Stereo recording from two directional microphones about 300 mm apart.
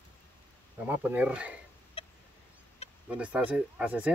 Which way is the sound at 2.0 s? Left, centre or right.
Centre.